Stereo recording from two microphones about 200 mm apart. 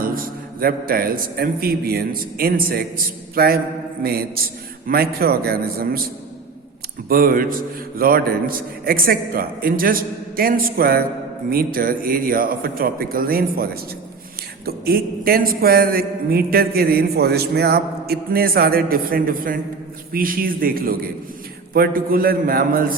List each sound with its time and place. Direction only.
0.0 s a man's voice: 45° right (ahead or behind)
4.9 s a man's voice: 50° right (ahead or behind)
7.1 s a man's voice: 45° right (ahead or behind)